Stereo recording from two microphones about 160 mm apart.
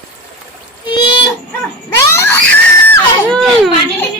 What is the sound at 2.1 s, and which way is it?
Baby cry, 15° left (ahead or behind).